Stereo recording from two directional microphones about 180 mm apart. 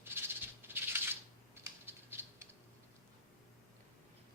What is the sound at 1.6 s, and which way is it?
Rattle, 15° right (ahead or behind).